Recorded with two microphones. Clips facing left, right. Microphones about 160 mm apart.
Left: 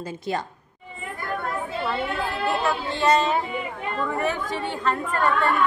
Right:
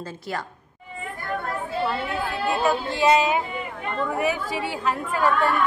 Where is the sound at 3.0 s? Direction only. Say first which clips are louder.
Right 1 dB; 5° right (ahead or behind).